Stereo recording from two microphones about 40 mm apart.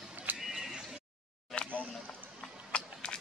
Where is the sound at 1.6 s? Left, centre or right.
Left.